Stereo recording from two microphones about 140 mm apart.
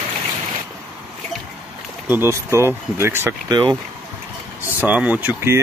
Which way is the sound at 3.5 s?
30° right (ahead or behind).